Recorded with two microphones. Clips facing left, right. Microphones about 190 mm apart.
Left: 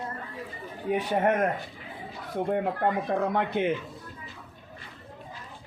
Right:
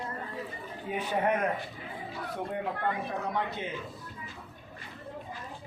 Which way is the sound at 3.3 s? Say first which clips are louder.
Left 7 dB; 60° left (ahead or behind).